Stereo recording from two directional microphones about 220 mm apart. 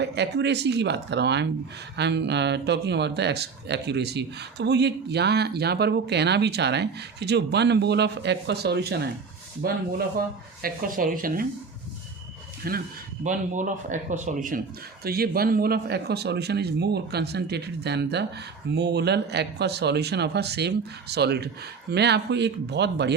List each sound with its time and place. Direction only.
0.0 s a man's voice: 50° right (ahead or behind)
12.6 s a man's voice: 45° right (ahead or behind)